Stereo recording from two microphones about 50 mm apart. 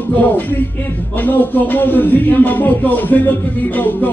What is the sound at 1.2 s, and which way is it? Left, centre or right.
Music, left.